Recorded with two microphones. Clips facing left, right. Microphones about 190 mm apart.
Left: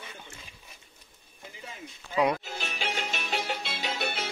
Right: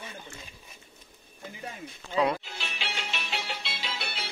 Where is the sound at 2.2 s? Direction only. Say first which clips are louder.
Left 1 dB; 10° left (ahead or behind).